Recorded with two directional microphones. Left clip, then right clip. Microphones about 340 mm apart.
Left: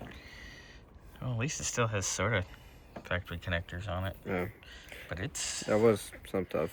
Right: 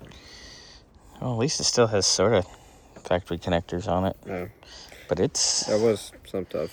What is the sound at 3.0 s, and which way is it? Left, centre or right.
Speech, centre.